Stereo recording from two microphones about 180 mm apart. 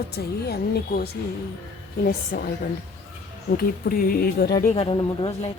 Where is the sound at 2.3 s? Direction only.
60° left (ahead or behind).